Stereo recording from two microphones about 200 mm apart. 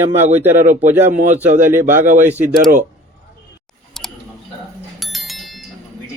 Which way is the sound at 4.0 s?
Centre (ahead or behind).